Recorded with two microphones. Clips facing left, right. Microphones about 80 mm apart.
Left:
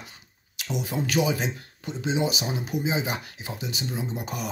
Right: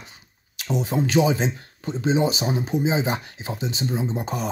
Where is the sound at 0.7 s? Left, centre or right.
Right.